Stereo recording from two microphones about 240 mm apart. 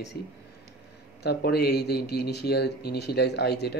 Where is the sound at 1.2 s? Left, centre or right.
Left.